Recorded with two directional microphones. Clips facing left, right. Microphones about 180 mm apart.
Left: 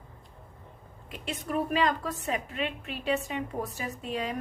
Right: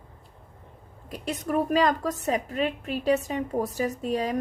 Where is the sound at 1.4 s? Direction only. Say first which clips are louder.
Right 4 dB; 45° right (ahead or behind).